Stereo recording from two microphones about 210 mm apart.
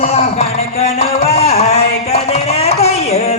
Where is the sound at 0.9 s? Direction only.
30° left (ahead or behind).